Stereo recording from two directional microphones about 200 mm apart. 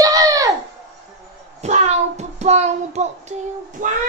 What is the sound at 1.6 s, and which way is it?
Child singing, 35° right (ahead or behind).